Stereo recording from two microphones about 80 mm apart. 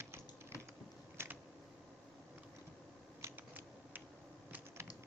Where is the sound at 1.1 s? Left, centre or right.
Right.